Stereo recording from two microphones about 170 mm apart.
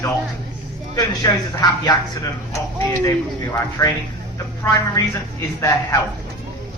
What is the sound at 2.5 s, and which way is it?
A woman's voice, 20° left (ahead or behind).